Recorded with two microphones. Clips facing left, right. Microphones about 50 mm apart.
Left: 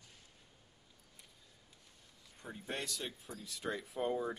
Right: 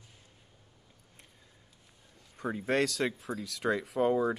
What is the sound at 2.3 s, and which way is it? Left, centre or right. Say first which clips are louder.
Speech: right 13 dB; right.